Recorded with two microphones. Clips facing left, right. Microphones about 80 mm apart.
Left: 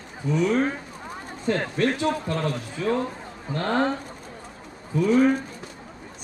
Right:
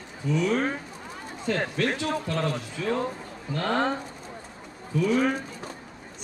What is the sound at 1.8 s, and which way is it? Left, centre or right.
Speech, centre.